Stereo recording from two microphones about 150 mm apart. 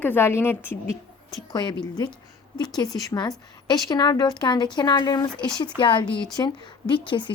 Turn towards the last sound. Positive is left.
turn(degrees=35)  # may be behind; listen again after turning